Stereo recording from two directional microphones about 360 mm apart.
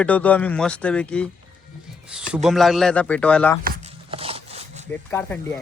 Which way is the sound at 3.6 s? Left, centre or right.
Centre.